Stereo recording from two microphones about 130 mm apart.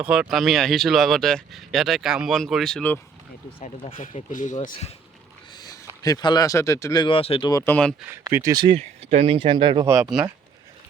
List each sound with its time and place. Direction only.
0.0 s speech: 5° right (ahead or behind)
3.6 s speech: 65° left (ahead or behind)
5.5 s a sound: 30° left (ahead or behind)
6.0 s speech: 30° left (ahead or behind)
7.5 s speech: 20° left (ahead or behind)
8.3 s speech: 20° right (ahead or behind)
8.5 s speech: 35° right (ahead or behind)
8.8 s speech: 55° right (ahead or behind); by 9.8 s 40° right (ahead or behind)
9.8 s speech: 10° right (ahead or behind)